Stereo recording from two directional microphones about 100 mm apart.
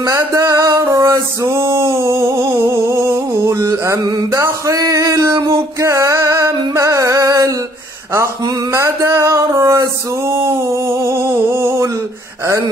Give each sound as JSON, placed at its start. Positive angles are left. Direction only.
{"t": 0.2, "sound": "music", "side_deg": -30}
{"t": 4.3, "sound": "a sound", "side_deg": -30}
{"t": 8.7, "sound": "music", "side_deg": -30}